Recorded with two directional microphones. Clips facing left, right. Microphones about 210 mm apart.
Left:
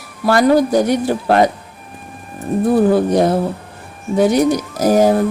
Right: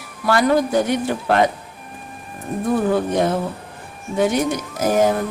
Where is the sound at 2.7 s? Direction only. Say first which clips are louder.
Left 5 dB; 35° left (ahead or behind).